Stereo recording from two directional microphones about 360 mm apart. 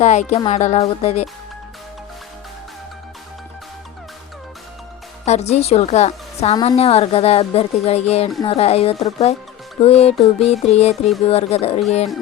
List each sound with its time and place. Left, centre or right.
0.0 s speech: centre
5.2 s a woman's voice: centre